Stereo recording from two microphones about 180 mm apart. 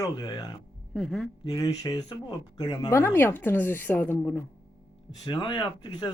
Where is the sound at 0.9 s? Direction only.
Centre (ahead or behind).